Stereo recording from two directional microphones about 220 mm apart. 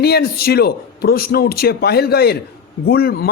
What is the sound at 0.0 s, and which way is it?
A man's voice, 45° left (ahead or behind).